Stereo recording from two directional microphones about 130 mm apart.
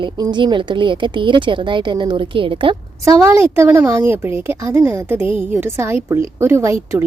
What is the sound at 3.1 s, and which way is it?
Speech, 25° right (ahead or behind).